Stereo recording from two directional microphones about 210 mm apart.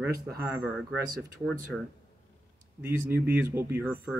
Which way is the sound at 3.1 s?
10° right (ahead or behind).